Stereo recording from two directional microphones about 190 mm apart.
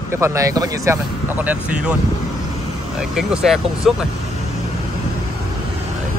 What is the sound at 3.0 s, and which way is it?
Speech, centre (ahead or behind).